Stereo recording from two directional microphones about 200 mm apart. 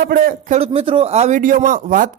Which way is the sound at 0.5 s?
30° right (ahead or behind).